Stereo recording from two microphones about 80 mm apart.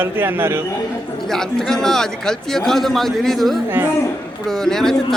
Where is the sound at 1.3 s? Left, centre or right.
Centre.